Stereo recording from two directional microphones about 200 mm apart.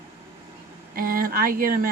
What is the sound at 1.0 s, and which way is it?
Speech, 45° right (ahead or behind).